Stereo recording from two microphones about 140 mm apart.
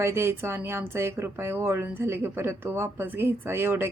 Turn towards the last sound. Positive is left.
turn(degrees=-15)  # may be behind; listen again after turning